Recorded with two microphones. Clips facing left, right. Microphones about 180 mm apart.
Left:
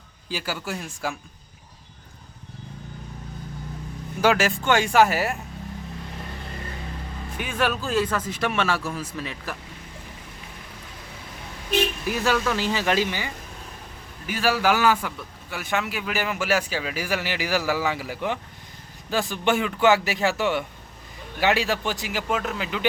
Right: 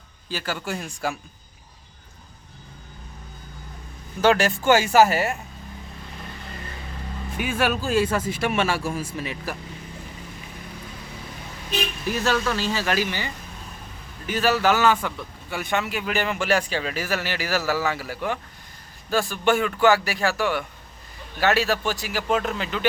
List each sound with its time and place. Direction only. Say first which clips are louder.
0.3 s speech: right 1 dB; 10° left (ahead or behind)
4.2 s speech: right 1 dB; 5° left (ahead or behind)
7.3 s speech: right 2 dB; 10° right (ahead or behind)
12.1 s a man's voice: right 1 dB; 10° left (ahead or behind)
22.3 s a man's voice: right 3 dB; 5° left (ahead or behind)